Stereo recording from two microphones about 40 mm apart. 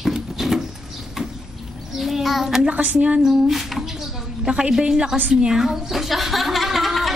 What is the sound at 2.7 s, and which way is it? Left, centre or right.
Speech, right.